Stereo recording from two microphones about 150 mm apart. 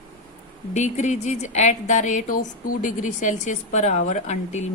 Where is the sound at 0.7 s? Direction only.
50° left (ahead or behind).